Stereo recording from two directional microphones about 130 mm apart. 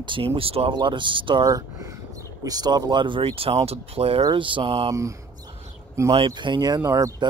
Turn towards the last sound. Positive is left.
turn(degrees=-25)  # may be behind; listen again after turning